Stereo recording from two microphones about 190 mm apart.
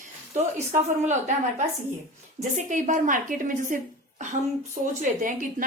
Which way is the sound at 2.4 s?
40° right (ahead or behind).